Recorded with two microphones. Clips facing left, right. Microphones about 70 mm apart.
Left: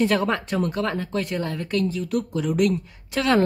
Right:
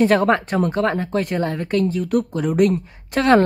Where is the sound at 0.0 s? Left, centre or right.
Right.